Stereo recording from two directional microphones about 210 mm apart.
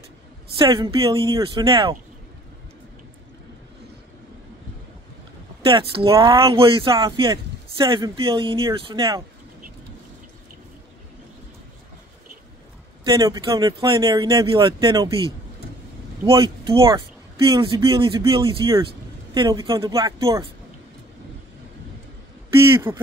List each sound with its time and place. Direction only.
0.6 s speech: 20° right (ahead or behind)
5.7 s speech: 25° right (ahead or behind)
13.0 s speech: 20° right (ahead or behind)
16.3 s speech: 20° right (ahead or behind)
22.6 s speech: 10° right (ahead or behind)